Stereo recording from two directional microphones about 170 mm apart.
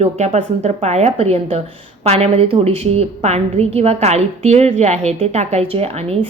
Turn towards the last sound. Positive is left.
turn(degrees=-35)  # may be behind; listen again after turning